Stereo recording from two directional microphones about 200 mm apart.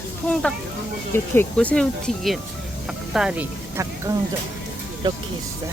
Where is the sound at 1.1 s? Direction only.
10° left (ahead or behind); by 4.1 s 15° right (ahead or behind).